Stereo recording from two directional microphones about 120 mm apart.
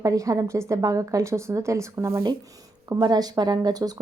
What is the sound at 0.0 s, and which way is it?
Speech, 30° right (ahead or behind).